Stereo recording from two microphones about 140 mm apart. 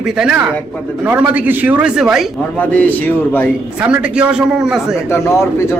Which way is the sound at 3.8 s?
10° right (ahead or behind).